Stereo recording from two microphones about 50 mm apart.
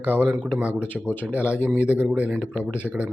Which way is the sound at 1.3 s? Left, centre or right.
Right.